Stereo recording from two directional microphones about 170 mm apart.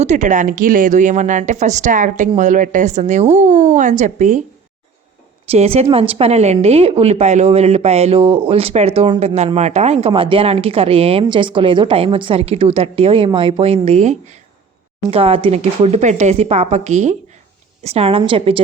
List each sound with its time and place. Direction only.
0.0 s speech: 45° right (ahead or behind)
5.5 s speech: 35° right (ahead or behind)